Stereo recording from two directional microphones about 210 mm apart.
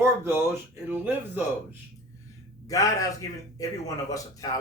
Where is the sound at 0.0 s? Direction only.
10° right (ahead or behind).